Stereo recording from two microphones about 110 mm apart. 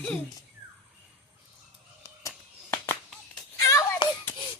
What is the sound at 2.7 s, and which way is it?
Music, 20° left (ahead or behind).